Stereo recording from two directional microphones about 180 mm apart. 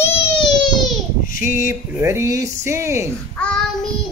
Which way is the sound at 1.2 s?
50° left (ahead or behind).